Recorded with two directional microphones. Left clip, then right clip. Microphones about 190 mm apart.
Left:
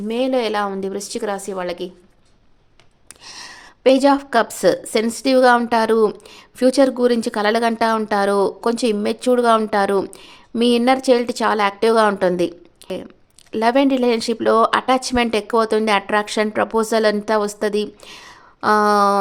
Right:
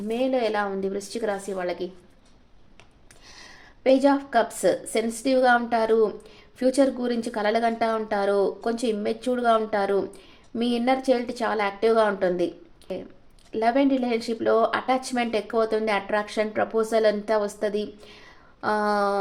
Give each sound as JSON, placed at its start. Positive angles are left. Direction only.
{"t": 0.1, "sound": "a woman's voice", "side_deg": 40}
{"t": 3.2, "sound": "a woman's voice", "side_deg": 45}
{"t": 13.5, "sound": "a woman's voice", "side_deg": 45}